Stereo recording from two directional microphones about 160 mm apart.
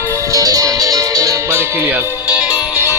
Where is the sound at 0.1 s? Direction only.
20° right (ahead or behind).